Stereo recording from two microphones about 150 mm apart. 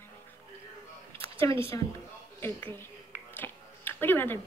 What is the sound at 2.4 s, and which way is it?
Speech, 15° left (ahead or behind).